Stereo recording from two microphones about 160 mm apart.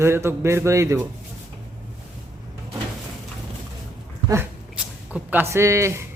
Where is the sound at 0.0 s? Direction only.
15° right (ahead or behind).